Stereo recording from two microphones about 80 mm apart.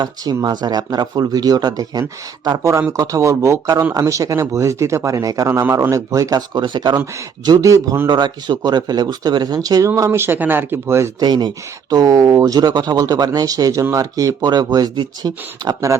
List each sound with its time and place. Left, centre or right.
0.4 s speech: right
5.5 s speech: right
5.9 s speech: right
7.4 s speech: right
8.0 s speech: right
11.2 s speech: right
12.5 s speech: right
14.9 s speech: right